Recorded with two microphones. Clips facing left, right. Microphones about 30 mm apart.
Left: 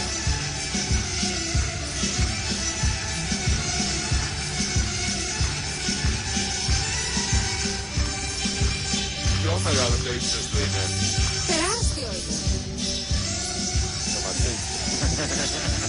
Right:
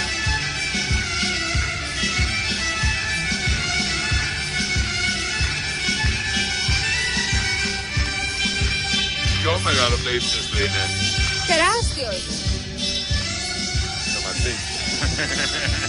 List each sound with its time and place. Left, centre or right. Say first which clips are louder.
6.9 s music: right 6 dB; right
9.5 s music: right 5 dB; right